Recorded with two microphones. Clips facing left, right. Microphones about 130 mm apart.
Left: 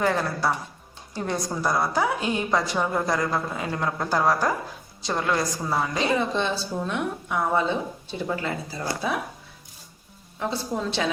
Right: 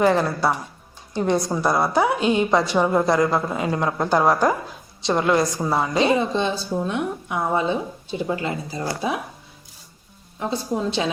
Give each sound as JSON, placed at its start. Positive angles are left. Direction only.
{"t": 0.0, "sound": "a woman's voice", "side_deg": -25}
{"t": 10.4, "sound": "speech", "side_deg": -15}